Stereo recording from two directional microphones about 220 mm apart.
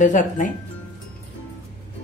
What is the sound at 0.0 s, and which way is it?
Speech, 35° left (ahead or behind).